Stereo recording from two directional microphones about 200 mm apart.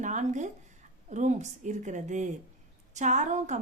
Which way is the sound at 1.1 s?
35° right (ahead or behind).